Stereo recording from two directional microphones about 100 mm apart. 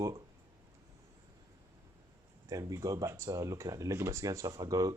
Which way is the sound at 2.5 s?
35° right (ahead or behind).